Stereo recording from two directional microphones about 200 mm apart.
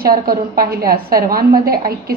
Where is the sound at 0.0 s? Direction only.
45° right (ahead or behind).